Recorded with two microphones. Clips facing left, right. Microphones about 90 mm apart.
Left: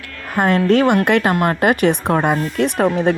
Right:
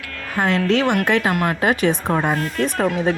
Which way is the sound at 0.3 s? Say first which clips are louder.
Left 4 dB; 50° left (ahead or behind).